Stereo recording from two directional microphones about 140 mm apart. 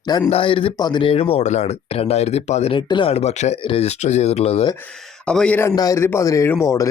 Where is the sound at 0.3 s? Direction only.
40° left (ahead or behind).